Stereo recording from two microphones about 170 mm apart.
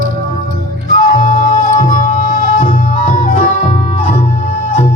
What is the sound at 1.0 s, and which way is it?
Music, 50° left (ahead or behind).